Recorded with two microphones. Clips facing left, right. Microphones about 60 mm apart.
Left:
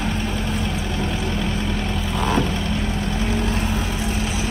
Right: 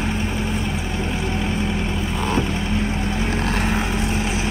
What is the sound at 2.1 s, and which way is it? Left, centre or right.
Vehicle, centre.